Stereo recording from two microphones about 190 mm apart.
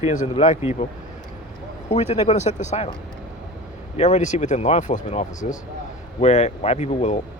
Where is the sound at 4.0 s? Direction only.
40° left (ahead or behind).